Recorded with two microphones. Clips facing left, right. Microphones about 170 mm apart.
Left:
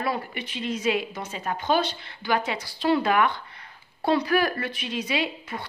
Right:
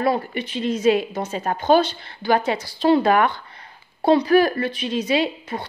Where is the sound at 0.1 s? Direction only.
30° right (ahead or behind).